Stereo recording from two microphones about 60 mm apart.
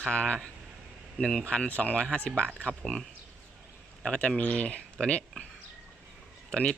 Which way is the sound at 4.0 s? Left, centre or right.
Centre.